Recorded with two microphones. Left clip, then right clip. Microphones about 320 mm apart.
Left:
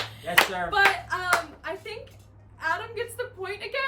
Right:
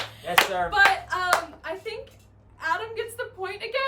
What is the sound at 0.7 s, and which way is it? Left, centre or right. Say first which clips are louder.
Clapping: right 2 dB; centre.